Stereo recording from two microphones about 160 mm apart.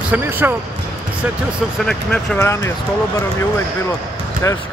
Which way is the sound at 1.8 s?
5° left (ahead or behind).